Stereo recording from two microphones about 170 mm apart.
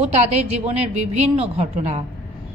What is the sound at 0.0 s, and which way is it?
A woman's voice, 40° right (ahead or behind).